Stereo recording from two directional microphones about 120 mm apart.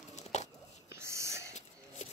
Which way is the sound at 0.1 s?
75° left (ahead or behind).